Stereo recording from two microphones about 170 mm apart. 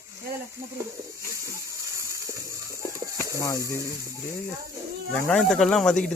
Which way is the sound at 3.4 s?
20° left (ahead or behind).